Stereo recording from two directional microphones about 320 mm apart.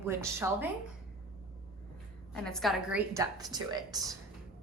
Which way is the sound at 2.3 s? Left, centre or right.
Centre.